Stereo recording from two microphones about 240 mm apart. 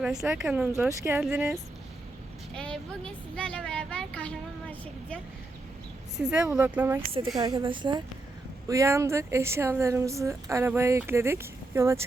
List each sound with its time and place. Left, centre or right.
0.0 s speech: centre
2.6 s a woman's voice: centre